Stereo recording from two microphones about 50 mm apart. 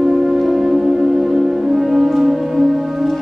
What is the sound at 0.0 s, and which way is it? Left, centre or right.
Music, centre.